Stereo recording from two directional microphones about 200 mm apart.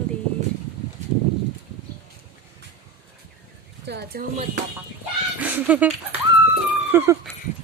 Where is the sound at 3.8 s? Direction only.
50° right (ahead or behind).